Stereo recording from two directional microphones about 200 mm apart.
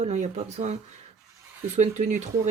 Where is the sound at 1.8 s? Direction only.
35° right (ahead or behind).